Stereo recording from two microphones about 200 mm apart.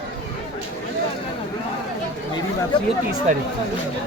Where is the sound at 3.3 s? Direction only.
35° right (ahead or behind).